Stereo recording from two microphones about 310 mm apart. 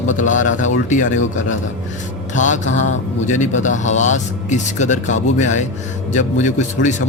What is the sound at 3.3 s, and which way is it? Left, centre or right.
Speech, left.